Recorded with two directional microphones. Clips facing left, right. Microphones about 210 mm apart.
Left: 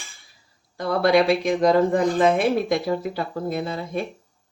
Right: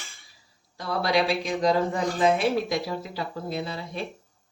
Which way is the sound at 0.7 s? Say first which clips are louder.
Left 7 dB; 55° left (ahead or behind).